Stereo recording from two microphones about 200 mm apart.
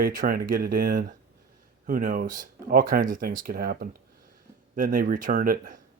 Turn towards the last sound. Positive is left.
turn(degrees=-40)  # may be behind; listen again after turning